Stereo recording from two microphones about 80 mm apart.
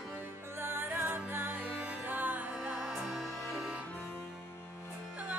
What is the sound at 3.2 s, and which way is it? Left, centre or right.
Music, centre.